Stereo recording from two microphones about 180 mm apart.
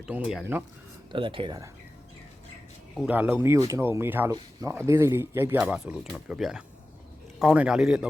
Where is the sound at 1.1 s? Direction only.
30° right (ahead or behind).